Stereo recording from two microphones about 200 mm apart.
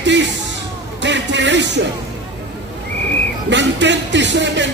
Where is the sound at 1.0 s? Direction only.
65° right (ahead or behind).